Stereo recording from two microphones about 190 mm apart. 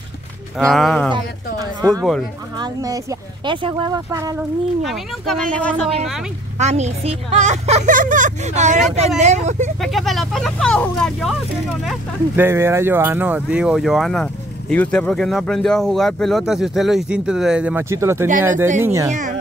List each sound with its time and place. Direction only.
0.6 s speech: centre (ahead or behind)
1.1 s speech: 20° right (ahead or behind)
4.4 s speech: centre (ahead or behind)
6.6 s speech: 35° right (ahead or behind)
9.8 s speech: centre (ahead or behind)
12.4 s speech: 15° right (ahead or behind)